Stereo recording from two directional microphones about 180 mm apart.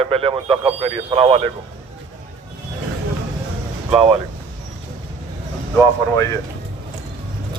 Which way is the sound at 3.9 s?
30° right (ahead or behind).